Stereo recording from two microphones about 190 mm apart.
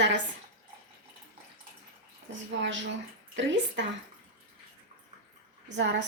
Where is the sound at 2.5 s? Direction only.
75° right (ahead or behind).